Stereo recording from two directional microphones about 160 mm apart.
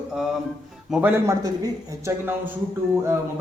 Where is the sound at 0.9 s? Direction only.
10° right (ahead or behind).